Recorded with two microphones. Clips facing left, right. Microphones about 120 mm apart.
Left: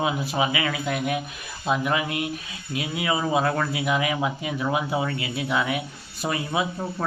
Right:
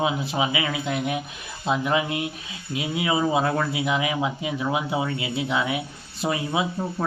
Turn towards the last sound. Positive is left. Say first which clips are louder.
# right 1 dB
turn(degrees=-10)  # may be behind; listen again after turning